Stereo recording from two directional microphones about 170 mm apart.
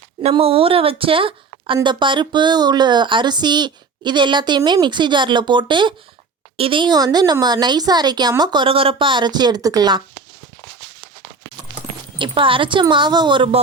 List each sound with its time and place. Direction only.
0.2 s a woman's voice: 35° right (ahead or behind)
12.2 s a woman's voice: 30° right (ahead or behind)